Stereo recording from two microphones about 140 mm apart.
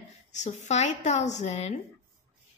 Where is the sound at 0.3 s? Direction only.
60° left (ahead or behind).